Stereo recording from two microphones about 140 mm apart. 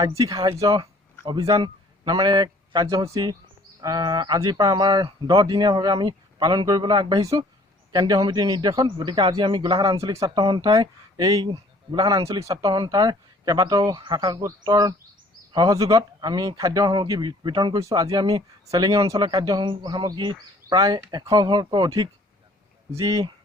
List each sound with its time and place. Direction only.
0.0 s a man's voice: 25° right (ahead or behind)